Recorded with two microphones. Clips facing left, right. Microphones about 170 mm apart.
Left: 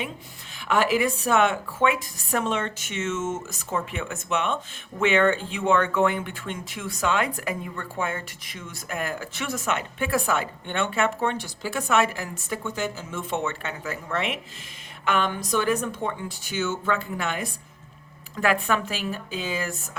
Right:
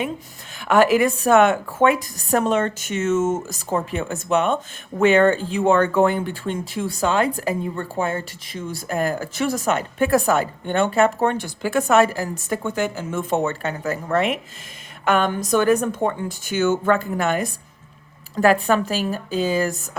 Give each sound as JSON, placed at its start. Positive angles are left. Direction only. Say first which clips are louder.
{"t": 0.7, "sound": "a woman's voice", "louder": "right 6 dB", "side_deg": -50}